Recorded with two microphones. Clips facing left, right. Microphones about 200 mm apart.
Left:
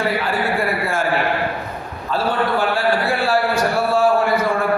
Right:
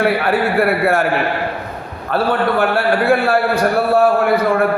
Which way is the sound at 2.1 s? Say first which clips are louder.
Right 4 dB; 60° right (ahead or behind).